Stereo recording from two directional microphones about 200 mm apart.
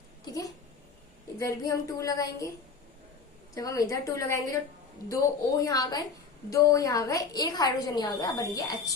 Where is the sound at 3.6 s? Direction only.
15° left (ahead or behind).